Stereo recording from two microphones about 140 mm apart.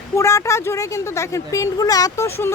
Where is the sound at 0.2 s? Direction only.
20° left (ahead or behind).